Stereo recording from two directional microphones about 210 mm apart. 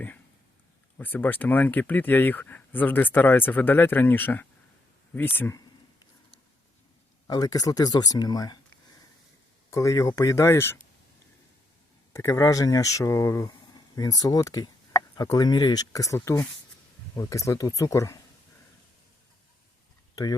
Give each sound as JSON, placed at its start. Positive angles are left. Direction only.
{"t": 0.9, "sound": "speech", "side_deg": 10}
{"t": 7.3, "sound": "speech", "side_deg": 20}
{"t": 9.6, "sound": "speech", "side_deg": 15}
{"t": 12.1, "sound": "speech", "side_deg": 15}